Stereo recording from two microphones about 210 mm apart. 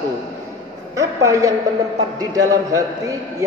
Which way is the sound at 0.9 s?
15° right (ahead or behind).